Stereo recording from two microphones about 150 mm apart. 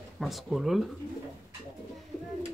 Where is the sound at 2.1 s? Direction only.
10° left (ahead or behind).